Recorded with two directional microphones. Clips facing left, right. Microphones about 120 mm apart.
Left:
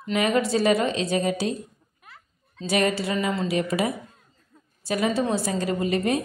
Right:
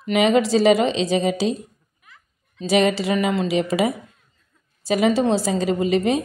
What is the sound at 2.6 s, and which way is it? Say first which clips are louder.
A woman's voice: right 5 dB; 90° right.